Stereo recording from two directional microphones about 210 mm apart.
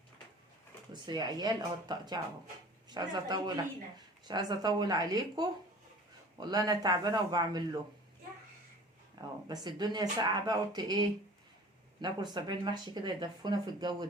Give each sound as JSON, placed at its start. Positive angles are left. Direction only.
{"t": 1.0, "sound": "speech", "side_deg": -20}
{"t": 9.5, "sound": "speech", "side_deg": -20}